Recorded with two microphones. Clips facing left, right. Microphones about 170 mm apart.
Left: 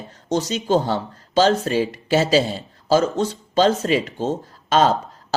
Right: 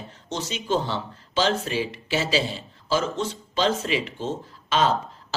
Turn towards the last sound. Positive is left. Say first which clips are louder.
# left 5 dB
turn(degrees=40)  # may be behind; listen again after turning